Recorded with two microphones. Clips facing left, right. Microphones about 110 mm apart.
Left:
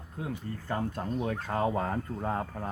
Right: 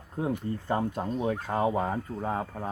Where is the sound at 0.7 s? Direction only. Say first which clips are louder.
Right 3 dB; 20° right (ahead or behind).